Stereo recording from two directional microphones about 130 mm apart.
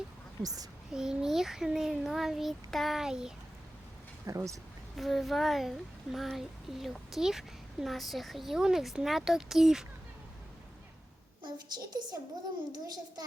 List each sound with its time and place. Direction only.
0.4 s speech: 30° right (ahead or behind)
0.9 s speech: 5° right (ahead or behind)
4.3 s speech: 25° right (ahead or behind)
4.9 s speech: centre (ahead or behind)
11.4 s a woman's voice: 35° right (ahead or behind)